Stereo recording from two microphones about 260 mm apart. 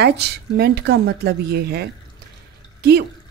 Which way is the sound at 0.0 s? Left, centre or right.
Right.